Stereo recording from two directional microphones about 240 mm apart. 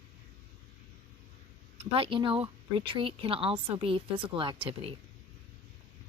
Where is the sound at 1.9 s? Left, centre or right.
Right.